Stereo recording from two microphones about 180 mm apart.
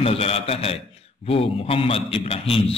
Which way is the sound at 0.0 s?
35° left (ahead or behind).